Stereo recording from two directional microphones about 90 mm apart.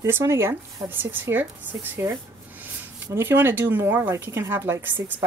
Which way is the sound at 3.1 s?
25° right (ahead or behind).